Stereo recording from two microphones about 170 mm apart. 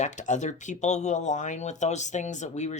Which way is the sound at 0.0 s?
45° left (ahead or behind).